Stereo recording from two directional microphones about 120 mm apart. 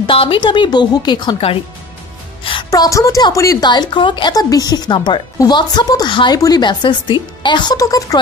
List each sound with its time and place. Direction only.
0.0 s speech: 45° left (ahead or behind)
2.7 s speech: 30° left (ahead or behind)